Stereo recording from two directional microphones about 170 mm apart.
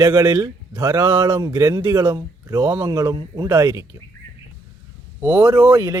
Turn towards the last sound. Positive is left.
turn(degrees=-10)  # may be behind; listen again after turning